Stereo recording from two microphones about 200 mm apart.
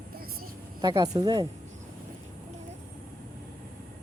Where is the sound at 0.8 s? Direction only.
20° right (ahead or behind).